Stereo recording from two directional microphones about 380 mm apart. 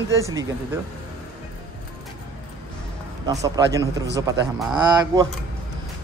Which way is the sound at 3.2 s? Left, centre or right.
Centre.